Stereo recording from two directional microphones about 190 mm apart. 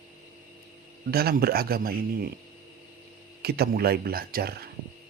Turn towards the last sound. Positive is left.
turn(degrees=-55)  # may be behind; listen again after turning